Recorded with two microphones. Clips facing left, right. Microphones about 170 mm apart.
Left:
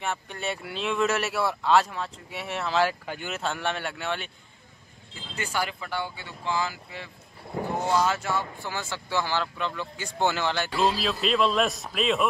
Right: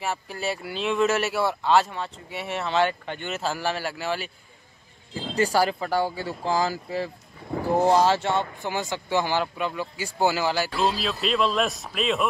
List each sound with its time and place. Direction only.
0.0 s speech: 5° right (ahead or behind)
5.1 s speech: 35° right (ahead or behind); by 12.3 s centre (ahead or behind)